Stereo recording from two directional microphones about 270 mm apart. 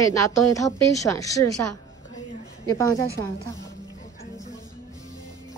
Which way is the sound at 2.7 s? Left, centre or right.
Centre.